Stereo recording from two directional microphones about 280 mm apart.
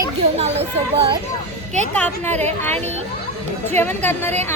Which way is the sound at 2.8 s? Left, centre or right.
Right.